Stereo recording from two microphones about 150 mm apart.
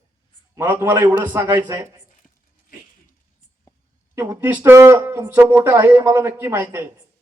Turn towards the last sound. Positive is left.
turn(degrees=-15)  # may be behind; listen again after turning